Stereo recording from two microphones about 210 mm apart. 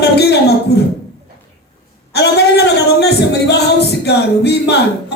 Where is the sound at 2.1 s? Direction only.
50° left (ahead or behind).